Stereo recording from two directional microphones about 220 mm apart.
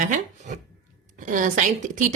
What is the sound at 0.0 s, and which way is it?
A woman's voice, 35° right (ahead or behind).